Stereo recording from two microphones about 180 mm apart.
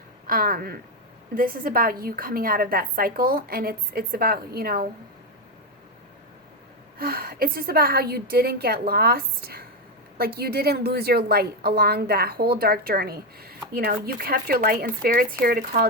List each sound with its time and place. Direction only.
0.3 s a woman's voice: 50° right (ahead or behind)
7.0 s a woman's voice: 55° right (ahead or behind)